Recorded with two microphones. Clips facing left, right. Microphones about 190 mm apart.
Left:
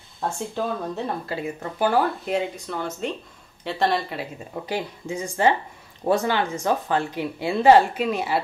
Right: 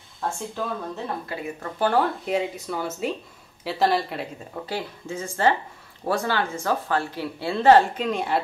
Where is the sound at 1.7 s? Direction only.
5° left (ahead or behind).